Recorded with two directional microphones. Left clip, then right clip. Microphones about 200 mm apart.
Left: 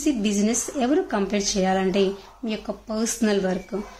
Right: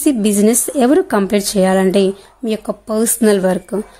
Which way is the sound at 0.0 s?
50° right (ahead or behind).